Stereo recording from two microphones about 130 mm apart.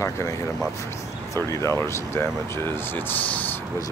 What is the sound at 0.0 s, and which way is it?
Speech, 25° left (ahead or behind).